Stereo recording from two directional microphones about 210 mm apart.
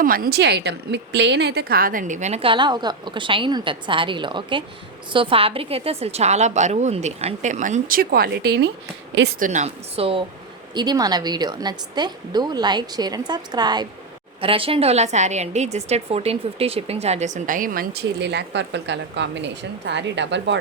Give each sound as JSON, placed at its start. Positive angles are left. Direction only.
{"t": 0.0, "sound": "a woman's voice", "side_deg": -45}
{"t": 9.4, "sound": "a woman's voice", "side_deg": -35}